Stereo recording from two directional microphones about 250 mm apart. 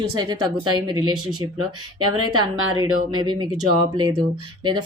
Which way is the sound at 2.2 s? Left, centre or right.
Right.